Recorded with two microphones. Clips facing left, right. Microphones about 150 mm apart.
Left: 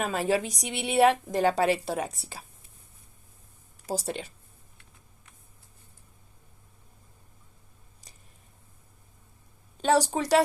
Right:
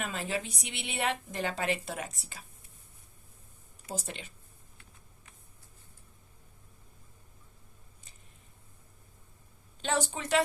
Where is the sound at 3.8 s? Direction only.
35° left (ahead or behind).